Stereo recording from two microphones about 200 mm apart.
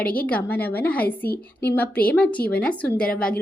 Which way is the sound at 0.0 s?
45° left (ahead or behind).